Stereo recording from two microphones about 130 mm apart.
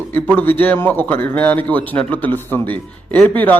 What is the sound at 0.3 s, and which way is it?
A man's voice, 15° left (ahead or behind).